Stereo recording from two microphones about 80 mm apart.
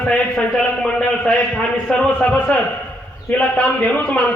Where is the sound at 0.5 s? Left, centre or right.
Centre.